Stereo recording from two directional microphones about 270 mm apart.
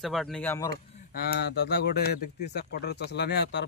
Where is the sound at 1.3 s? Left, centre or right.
Left.